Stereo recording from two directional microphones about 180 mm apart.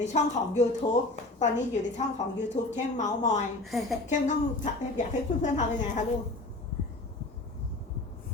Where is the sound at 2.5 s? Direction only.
40° left (ahead or behind).